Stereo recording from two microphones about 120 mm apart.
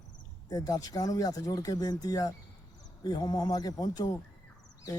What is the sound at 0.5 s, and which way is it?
Speech, 30° left (ahead or behind).